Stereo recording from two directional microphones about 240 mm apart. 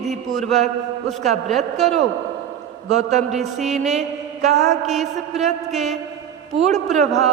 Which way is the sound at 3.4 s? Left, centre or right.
Centre.